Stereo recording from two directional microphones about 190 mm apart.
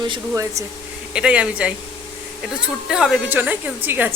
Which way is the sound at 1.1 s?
5° right (ahead or behind).